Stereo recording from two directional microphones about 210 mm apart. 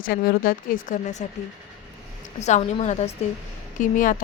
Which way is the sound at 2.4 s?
35° left (ahead or behind).